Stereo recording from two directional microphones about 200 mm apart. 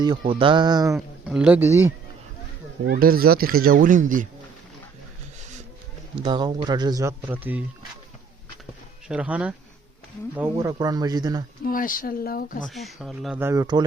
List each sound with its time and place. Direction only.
0.3 s speech: 25° right (ahead or behind)
1.3 s speech: 5° right (ahead or behind)
2.8 s speech: 45° right (ahead or behind)
6.2 s speech: 25° right (ahead or behind); by 7.6 s 10° right (ahead or behind)
9.0 s speech: 5° right (ahead or behind)
11.6 s speech: 45° left (ahead or behind)
12.6 s speech: centre (ahead or behind)
13.4 s speech: 15° right (ahead or behind)